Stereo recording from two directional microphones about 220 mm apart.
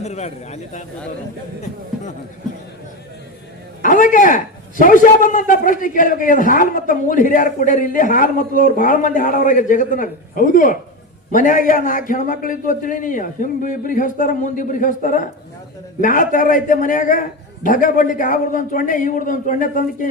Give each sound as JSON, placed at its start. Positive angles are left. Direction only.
{"t": 0.0, "sound": "a man's voice", "side_deg": 30}
{"t": 3.8, "sound": "a man's voice", "side_deg": 35}